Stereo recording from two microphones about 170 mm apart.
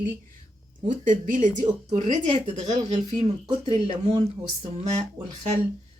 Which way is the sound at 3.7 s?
30° right (ahead or behind).